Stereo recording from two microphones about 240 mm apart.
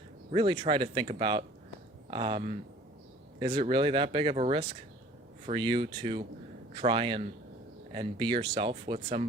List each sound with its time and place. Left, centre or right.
0.3 s speech: centre